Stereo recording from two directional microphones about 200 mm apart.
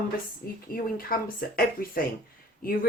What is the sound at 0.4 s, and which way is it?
Speech, 50° left (ahead or behind).